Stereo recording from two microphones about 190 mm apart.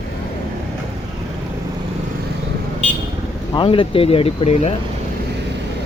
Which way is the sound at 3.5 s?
25° left (ahead or behind).